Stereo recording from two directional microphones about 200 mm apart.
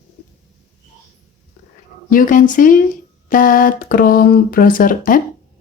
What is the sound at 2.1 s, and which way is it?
Speech, 40° left (ahead or behind).